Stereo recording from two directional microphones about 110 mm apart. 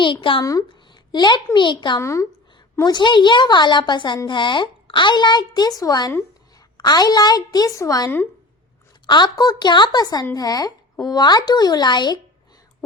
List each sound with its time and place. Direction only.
0.0 s speech: 45° left (ahead or behind)
0.7 s a sound: 45° left (ahead or behind)
1.5 s a woman's voice: 45° left (ahead or behind)
2.0 s speech: 25° left (ahead or behind)
2.7 s a woman's voice: 40° left (ahead or behind)